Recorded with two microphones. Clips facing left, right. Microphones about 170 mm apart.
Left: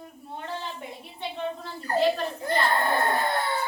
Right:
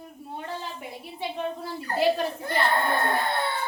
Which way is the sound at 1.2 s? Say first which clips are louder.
Right 1 dB; 10° right (ahead or behind).